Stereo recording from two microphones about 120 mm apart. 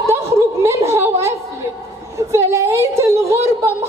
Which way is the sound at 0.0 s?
20° right (ahead or behind).